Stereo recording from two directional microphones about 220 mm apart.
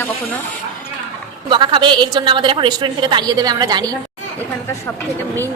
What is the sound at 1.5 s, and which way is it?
A woman's voice, 20° right (ahead or behind).